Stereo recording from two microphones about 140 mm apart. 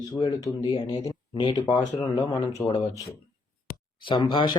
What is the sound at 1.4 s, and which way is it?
Speech, 35° left (ahead or behind).